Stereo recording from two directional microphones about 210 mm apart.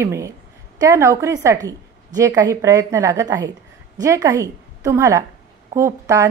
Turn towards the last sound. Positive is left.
turn(degrees=-15)  # may be behind; listen again after turning